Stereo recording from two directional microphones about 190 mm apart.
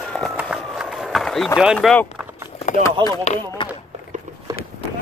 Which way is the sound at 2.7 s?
40° left (ahead or behind).